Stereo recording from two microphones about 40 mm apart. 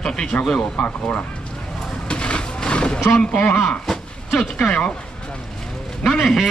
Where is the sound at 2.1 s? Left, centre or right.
Left.